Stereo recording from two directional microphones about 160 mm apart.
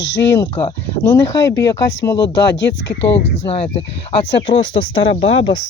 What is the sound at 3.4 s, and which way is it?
Speech, 40° left (ahead or behind).